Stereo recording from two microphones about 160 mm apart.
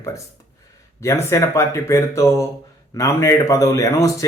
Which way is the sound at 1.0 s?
15° left (ahead or behind).